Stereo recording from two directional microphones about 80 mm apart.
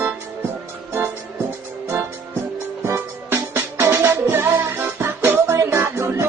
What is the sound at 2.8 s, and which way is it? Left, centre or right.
Music, right.